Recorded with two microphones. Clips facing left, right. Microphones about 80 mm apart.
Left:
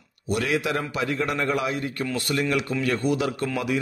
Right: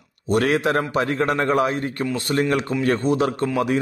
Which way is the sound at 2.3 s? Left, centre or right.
Right.